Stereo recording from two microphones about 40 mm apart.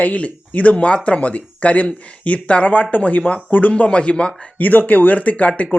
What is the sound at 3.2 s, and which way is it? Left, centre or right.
Speech, left.